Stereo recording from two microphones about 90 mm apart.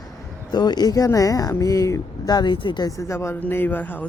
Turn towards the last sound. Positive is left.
turn(degrees=20)  # may be behind; listen again after turning